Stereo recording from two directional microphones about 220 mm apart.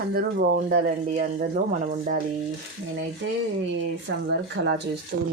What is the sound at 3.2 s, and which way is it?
Speech, 60° right (ahead or behind).